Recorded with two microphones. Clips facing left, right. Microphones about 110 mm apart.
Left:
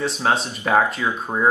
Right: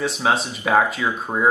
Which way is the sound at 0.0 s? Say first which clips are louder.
Even; centre (ahead or behind).